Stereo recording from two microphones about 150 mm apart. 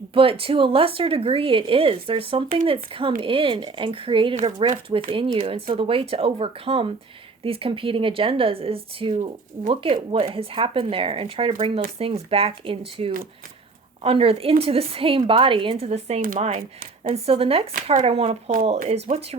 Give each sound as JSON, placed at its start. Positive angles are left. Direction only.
{"t": 0.1, "sound": "speech", "side_deg": -35}